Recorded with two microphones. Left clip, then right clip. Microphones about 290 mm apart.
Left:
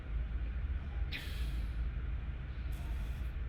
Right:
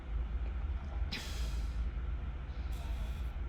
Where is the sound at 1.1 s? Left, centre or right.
Right.